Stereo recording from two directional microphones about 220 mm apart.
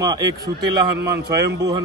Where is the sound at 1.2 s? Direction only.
50° right (ahead or behind).